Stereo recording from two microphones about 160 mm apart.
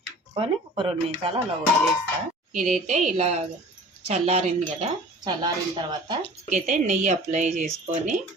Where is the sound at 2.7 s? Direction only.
50° right (ahead or behind).